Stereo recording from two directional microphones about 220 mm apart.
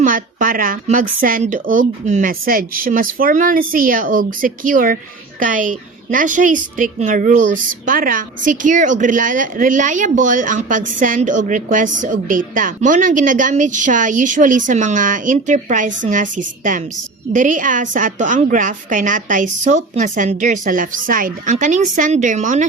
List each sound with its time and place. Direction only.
0.0 s a woman's voice: 40° right (ahead or behind)
17.3 s a woman's voice: 35° right (ahead or behind)